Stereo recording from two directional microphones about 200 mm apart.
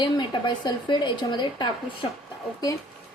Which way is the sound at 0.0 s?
20° left (ahead or behind).